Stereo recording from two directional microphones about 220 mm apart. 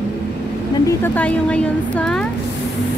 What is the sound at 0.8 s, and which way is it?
A woman's voice, 10° left (ahead or behind).